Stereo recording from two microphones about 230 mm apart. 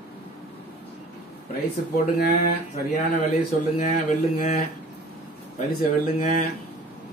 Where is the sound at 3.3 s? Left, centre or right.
Left.